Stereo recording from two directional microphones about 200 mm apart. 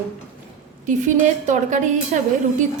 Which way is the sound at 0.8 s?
40° right (ahead or behind).